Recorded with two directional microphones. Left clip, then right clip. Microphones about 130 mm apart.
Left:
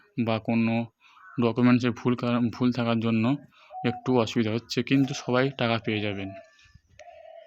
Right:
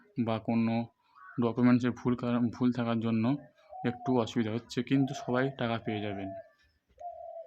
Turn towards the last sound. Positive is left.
turn(degrees=15)  # may be behind; listen again after turning